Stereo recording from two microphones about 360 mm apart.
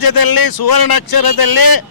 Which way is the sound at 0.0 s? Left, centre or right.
Left.